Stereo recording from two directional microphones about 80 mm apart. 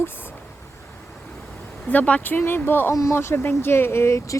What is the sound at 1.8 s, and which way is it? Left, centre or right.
Speech, centre.